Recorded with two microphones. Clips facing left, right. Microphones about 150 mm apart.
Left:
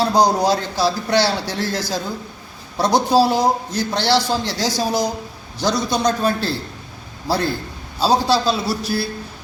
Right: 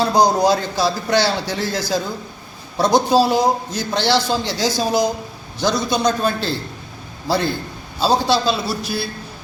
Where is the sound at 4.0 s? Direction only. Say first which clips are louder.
Right 1 dB; 35° left (ahead or behind).